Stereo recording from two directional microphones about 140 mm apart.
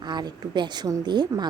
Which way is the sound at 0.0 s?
30° right (ahead or behind).